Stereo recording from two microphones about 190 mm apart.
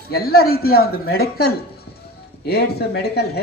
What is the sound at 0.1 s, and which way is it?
Speech, 55° left (ahead or behind).